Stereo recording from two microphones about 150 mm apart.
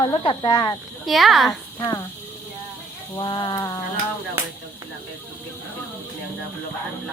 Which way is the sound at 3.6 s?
20° left (ahead or behind).